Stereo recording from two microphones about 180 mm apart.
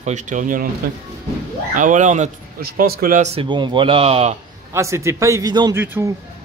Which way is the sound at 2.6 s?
60° right (ahead or behind).